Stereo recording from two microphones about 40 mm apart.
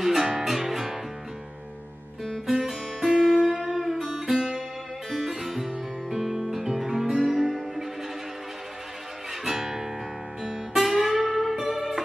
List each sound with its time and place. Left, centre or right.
0.0 s music: centre
2.4 s music: centre
3.3 s music: centre
4.4 s music: centre
5.1 s music: centre
9.4 s guitar: centre
10.4 s music: centre